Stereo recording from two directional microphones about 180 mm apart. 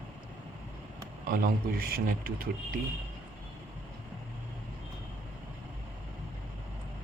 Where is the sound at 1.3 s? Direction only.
55° right (ahead or behind).